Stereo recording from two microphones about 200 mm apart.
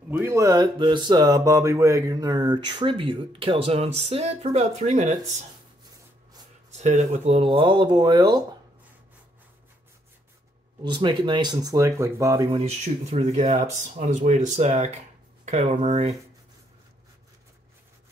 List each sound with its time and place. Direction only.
0.1 s speech: 10° right (ahead or behind); by 5.1 s 35° right (ahead or behind)
6.7 s speech: 35° right (ahead or behind)
10.8 s speech: 25° right (ahead or behind)
12.5 s speech: 30° right (ahead or behind)